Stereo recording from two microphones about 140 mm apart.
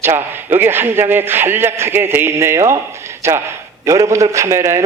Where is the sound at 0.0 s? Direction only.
15° right (ahead or behind).